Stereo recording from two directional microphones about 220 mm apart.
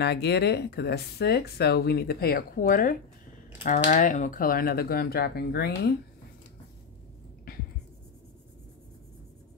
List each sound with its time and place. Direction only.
0.0 s speech: 50° left (ahead or behind)